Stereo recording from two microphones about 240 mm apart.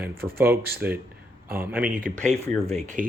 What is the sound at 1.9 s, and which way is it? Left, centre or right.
Speech, right.